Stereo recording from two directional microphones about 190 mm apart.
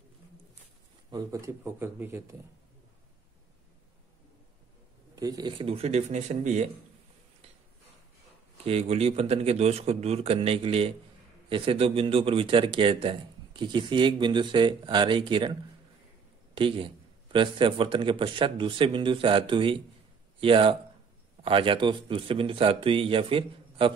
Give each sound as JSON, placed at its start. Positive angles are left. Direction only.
{"t": 1.1, "sound": "speech", "side_deg": -15}
{"t": 5.1, "sound": "a man's voice", "side_deg": -20}
{"t": 8.6, "sound": "a man's voice", "side_deg": -35}
{"t": 16.5, "sound": "speech", "side_deg": -30}